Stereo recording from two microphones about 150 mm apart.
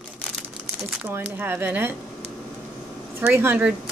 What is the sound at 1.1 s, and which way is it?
Speech, 15° right (ahead or behind).